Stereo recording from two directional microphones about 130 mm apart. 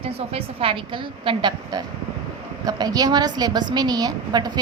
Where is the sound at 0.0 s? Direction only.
45° right (ahead or behind).